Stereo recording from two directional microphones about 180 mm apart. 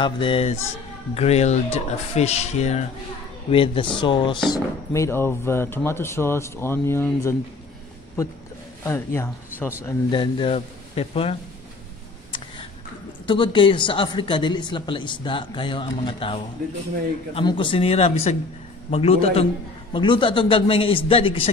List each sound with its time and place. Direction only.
0.0 s speech: 30° left (ahead or behind)
8.8 s speech: 15° left (ahead or behind)
10.1 s speech: 25° left (ahead or behind)
13.3 s speech: 25° left (ahead or behind)